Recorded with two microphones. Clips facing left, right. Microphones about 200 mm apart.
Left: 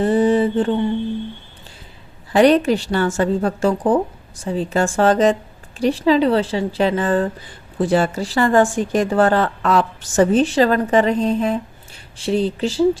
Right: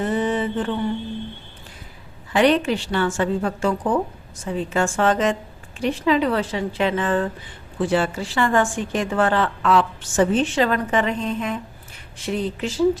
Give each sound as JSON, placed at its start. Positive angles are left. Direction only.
{"t": 0.0, "sound": "mantra", "side_deg": 35}
{"t": 2.3, "sound": "a woman's voice", "side_deg": 40}